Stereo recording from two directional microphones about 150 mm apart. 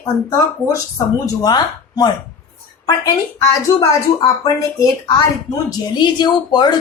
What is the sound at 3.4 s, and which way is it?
Speech, 20° left (ahead or behind).